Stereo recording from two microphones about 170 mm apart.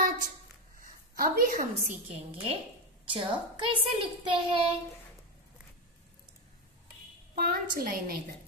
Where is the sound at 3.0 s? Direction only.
30° right (ahead or behind).